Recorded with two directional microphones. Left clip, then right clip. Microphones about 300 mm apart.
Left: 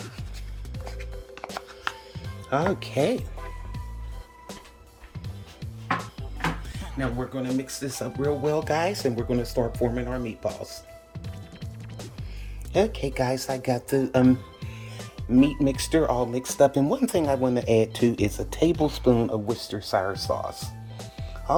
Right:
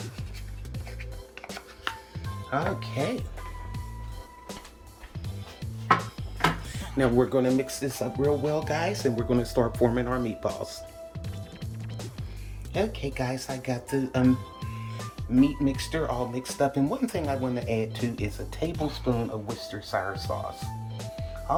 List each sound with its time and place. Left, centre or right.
1.9 s music: centre
2.5 s speech: left
5.5 s music: centre
7.0 s speech: right
7.4 s speech: centre
9.1 s speech: centre
11.2 s music: centre
12.7 s speech: centre
14.6 s music: centre
15.3 s speech: left